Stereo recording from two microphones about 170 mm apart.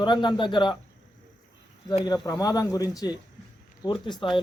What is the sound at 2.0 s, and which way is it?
Speech, 20° left (ahead or behind).